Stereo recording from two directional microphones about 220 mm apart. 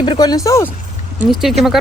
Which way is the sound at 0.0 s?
20° left (ahead or behind).